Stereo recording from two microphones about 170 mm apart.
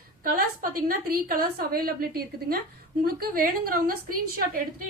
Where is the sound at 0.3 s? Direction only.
60° right (ahead or behind).